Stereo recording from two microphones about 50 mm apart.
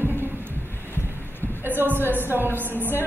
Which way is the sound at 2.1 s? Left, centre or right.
Right.